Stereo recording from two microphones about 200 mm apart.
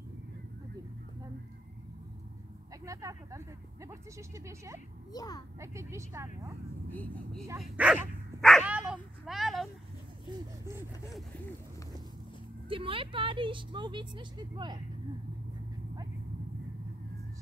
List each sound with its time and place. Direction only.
2.8 s speech: 15° right (ahead or behind)
5.1 s speech: 20° left (ahead or behind)
5.6 s speech: 15° right (ahead or behind)
6.9 s speech: 10° left (ahead or behind)
7.6 s dog: 5° right (ahead or behind)
12.6 s a woman's voice: 25° right (ahead or behind)